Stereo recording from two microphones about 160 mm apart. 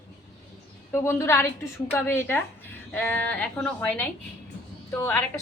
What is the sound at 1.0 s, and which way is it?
Speech, 15° left (ahead or behind).